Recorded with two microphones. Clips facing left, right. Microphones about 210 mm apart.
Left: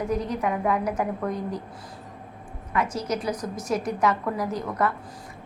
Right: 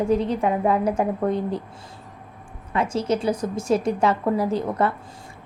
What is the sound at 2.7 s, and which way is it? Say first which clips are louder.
A woman's voice: right 4 dB; 25° right (ahead or behind).